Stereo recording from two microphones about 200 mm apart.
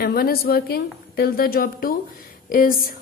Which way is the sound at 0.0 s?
50° left (ahead or behind).